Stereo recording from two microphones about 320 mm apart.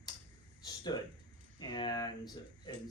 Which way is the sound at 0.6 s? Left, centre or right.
Centre.